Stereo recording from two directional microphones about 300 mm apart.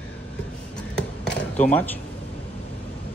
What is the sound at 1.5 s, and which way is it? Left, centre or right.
Speech, centre.